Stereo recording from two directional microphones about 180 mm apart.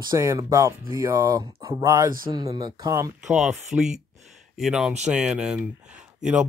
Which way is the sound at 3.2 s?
Centre (ahead or behind).